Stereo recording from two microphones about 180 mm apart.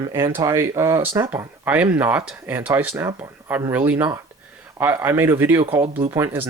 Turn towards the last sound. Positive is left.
turn(degrees=-15)  # may be behind; listen again after turning